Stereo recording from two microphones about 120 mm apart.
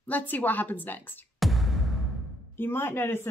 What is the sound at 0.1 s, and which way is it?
Speech, 15° left (ahead or behind).